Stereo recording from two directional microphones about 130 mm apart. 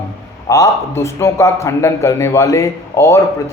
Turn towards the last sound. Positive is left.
turn(degrees=20)  # may be behind; listen again after turning